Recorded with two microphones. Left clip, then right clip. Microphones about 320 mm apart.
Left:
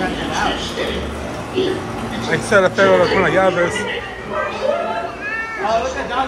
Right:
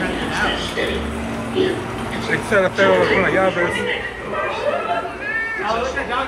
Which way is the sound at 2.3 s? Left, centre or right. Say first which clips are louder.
Left 3 dB; centre.